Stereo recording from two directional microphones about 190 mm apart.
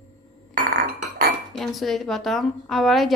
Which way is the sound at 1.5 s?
Centre (ahead or behind).